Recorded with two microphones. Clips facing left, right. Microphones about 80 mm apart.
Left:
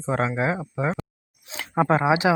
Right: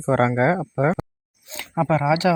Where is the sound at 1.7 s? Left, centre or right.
Left.